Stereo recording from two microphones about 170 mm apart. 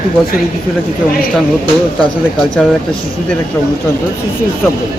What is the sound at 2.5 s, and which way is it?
Speech, centre (ahead or behind).